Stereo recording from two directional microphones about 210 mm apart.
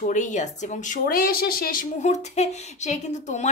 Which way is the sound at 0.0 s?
35° left (ahead or behind).